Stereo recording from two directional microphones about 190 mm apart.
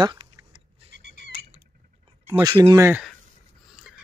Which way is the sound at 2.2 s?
15° right (ahead or behind).